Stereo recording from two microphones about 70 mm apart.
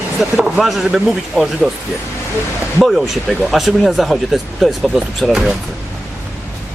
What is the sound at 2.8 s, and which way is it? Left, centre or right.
Speech, centre.